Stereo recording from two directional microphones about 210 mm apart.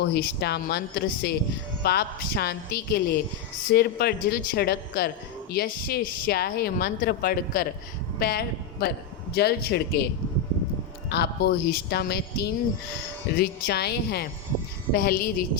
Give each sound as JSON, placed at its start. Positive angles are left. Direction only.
{"t": 0.0, "sound": "speech", "side_deg": 50}
{"t": 11.1, "sound": "speech", "side_deg": 50}